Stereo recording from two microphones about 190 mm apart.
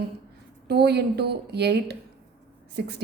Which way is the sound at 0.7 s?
60° right (ahead or behind).